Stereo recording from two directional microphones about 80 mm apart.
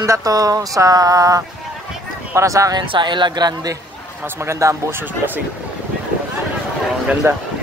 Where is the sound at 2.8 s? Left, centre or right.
Right.